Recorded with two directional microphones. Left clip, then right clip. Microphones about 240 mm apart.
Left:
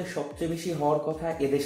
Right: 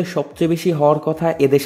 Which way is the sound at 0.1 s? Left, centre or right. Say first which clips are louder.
Right 13 dB; right.